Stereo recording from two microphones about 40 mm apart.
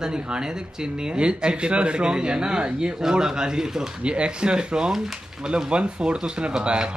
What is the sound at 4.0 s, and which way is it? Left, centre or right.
Speech, right.